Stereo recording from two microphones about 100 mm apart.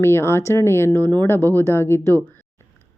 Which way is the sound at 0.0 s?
25° left (ahead or behind).